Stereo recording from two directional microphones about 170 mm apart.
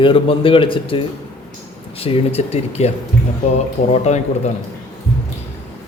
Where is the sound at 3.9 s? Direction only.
40° left (ahead or behind).